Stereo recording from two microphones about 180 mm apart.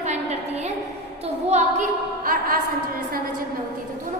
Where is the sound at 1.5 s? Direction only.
40° right (ahead or behind).